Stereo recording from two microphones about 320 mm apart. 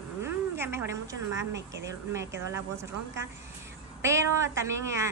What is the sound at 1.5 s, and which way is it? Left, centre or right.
Speech, right.